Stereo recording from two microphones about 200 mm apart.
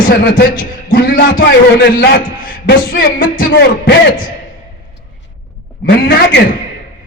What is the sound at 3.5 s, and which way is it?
Speech, 60° left (ahead or behind).